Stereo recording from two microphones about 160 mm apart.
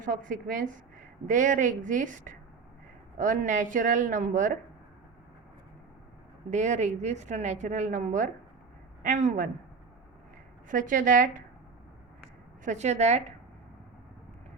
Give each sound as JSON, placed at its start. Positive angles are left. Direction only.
{"t": 0.0, "sound": "a woman's voice", "side_deg": -55}
{"t": 6.5, "sound": "a woman's voice", "side_deg": -50}
{"t": 10.7, "sound": "a woman's voice", "side_deg": -55}
{"t": 12.6, "sound": "a woman's voice", "side_deg": -45}